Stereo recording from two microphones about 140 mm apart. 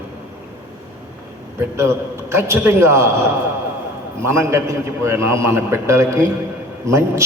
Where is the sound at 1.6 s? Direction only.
20° right (ahead or behind).